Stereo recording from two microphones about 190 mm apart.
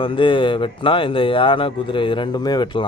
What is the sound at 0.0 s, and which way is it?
Speech, 25° left (ahead or behind).